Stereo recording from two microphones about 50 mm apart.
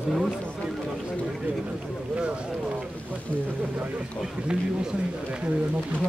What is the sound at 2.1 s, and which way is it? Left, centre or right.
Speech, right.